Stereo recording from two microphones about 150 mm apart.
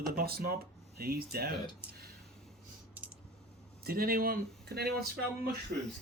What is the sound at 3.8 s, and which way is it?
Speech, 80° right.